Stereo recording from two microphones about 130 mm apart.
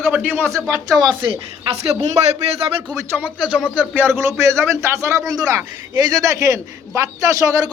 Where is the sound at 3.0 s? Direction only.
15° right (ahead or behind).